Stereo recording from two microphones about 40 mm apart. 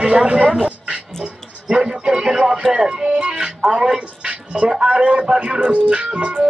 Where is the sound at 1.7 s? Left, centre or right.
Centre.